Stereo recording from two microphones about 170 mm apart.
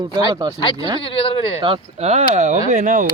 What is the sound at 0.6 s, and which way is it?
Speech, 30° left (ahead or behind).